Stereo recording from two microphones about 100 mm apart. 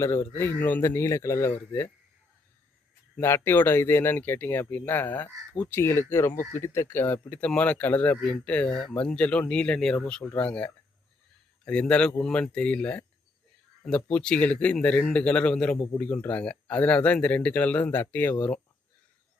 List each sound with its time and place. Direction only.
0.0 s speech: 25° left (ahead or behind)
3.2 s speech: 25° left (ahead or behind)